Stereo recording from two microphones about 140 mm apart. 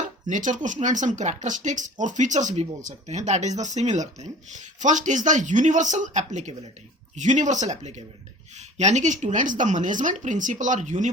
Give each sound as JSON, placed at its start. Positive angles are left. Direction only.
{"t": 0.3, "sound": "speech", "side_deg": -65}